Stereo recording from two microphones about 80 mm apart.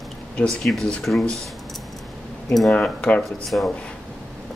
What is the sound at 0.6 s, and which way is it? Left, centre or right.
Speech, centre.